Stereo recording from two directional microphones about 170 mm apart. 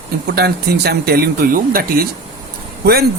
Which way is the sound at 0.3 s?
70° right (ahead or behind).